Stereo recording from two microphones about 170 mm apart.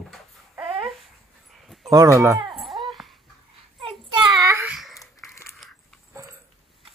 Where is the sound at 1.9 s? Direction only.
20° right (ahead or behind).